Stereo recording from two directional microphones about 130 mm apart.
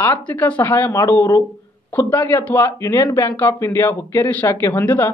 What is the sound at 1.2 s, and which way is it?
Speech, 30° left (ahead or behind).